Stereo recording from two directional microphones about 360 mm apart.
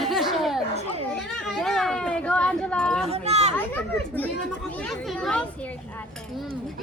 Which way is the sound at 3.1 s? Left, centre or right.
Centre.